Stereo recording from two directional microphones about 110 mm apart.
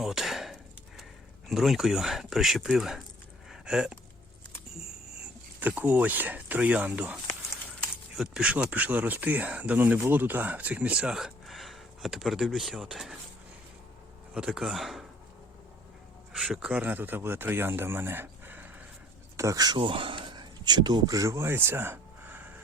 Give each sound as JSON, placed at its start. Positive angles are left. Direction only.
{"t": 0.0, "sound": "chop", "side_deg": -5}
{"t": 1.5, "sound": "speech", "side_deg": 0}
{"t": 3.5, "sound": "a sound", "side_deg": -5}
{"t": 5.5, "sound": "speech", "side_deg": -15}
{"t": 14.3, "sound": "speech", "side_deg": -5}
{"t": 16.4, "sound": "speech", "side_deg": -5}
{"t": 19.4, "sound": "speech", "side_deg": -30}